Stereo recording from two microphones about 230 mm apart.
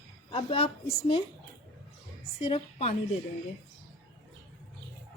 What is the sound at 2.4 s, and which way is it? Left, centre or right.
Speech, left.